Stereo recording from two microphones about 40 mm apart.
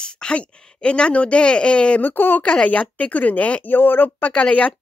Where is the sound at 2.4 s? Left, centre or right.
Left.